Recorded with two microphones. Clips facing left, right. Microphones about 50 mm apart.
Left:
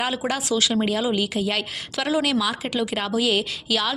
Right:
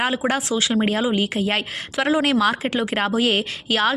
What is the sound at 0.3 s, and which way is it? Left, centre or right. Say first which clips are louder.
Speech: right 2 dB; right.